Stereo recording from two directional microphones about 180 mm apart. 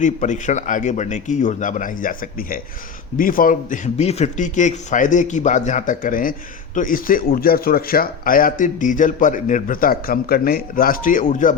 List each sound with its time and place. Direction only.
0.0 s a man's voice: 45° left (ahead or behind)